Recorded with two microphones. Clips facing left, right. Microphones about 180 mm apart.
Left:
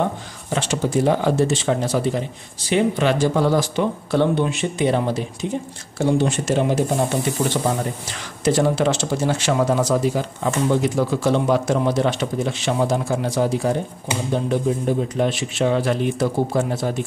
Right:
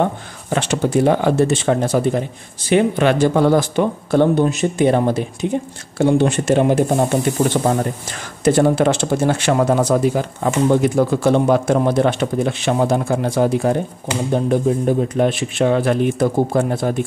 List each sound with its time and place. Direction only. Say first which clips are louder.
0.5 s speech: right 4 dB; 60° right (ahead or behind)